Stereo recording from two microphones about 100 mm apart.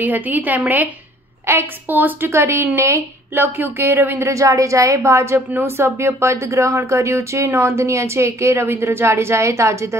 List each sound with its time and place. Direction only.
0.0 s a woman's voice: 15° right (ahead or behind)